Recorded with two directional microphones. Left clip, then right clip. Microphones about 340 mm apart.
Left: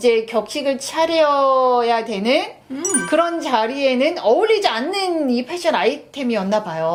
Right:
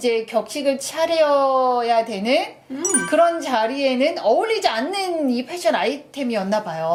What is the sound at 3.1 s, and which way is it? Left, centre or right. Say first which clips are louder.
A woman's voice: even; left.